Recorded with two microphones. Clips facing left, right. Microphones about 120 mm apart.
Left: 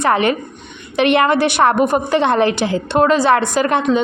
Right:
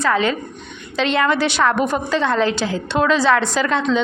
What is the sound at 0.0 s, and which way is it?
A woman's voice, 60° left (ahead or behind).